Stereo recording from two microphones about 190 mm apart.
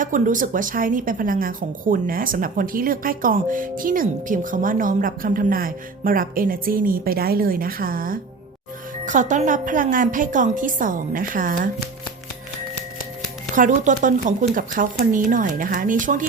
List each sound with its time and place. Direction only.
0.0 s a woman's voice: 45° right (ahead or behind)
13.6 s a woman's voice: 40° right (ahead or behind)